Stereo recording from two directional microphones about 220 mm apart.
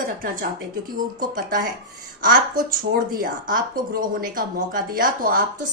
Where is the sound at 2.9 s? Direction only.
40° right (ahead or behind).